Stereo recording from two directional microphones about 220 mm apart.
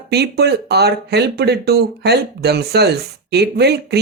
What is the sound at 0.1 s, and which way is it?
Speech, 50° right (ahead or behind).